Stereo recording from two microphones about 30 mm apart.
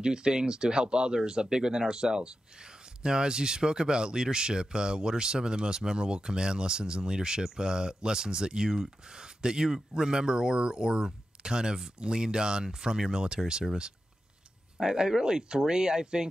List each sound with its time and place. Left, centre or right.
0.0 s speech: right
14.8 s speech: right